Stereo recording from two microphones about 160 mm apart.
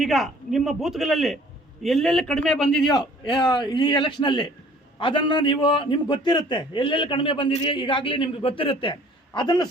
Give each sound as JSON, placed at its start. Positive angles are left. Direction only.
{"t": 0.0, "sound": "a man's voice", "side_deg": 0}
{"t": 2.9, "sound": "a man's voice", "side_deg": 30}